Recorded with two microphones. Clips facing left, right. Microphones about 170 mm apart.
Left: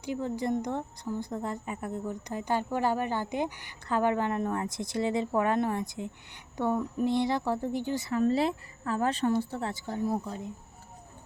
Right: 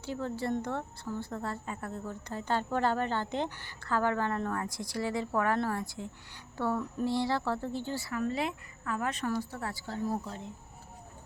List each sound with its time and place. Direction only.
0.0 s a woman's voice: 15° left (ahead or behind)